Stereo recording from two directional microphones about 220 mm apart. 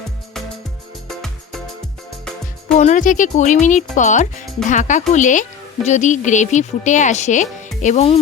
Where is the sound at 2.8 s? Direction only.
35° left (ahead or behind).